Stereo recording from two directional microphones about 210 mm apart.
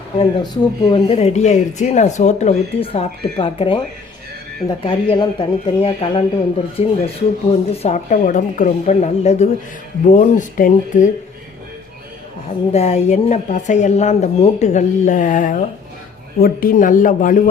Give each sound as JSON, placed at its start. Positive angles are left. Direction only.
{"t": 0.2, "sound": "a woman's voice", "side_deg": 20}
{"t": 12.7, "sound": "a woman's voice", "side_deg": 30}